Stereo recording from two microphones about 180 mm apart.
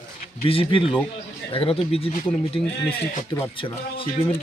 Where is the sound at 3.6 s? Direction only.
30° left (ahead or behind).